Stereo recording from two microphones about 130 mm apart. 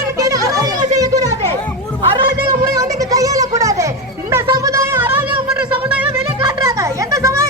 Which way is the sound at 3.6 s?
25° right (ahead or behind).